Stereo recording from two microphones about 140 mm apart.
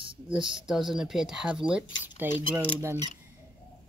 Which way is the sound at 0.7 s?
Centre (ahead or behind).